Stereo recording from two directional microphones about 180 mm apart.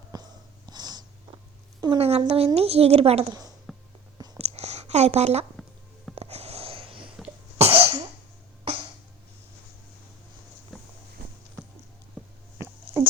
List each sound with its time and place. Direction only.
0.1 s wheeze: 20° right (ahead or behind)
0.7 s a sound: 25° right (ahead or behind)
1.8 s a woman's voice: 30° right (ahead or behind)
3.7 s music: centre (ahead or behind)
4.4 s a sound: 35° right (ahead or behind)
6.1 s sniff: 35° right (ahead or behind)
7.6 s cough: 30° right (ahead or behind)
8.7 s a sound: 30° right (ahead or behind)
10.7 s walk: centre (ahead or behind)